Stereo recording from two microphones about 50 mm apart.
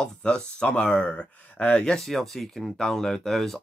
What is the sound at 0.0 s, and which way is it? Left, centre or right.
Speech, centre.